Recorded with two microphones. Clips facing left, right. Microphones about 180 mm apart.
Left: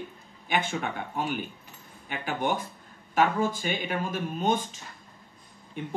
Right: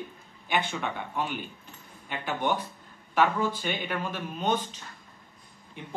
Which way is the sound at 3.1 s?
45° left (ahead or behind).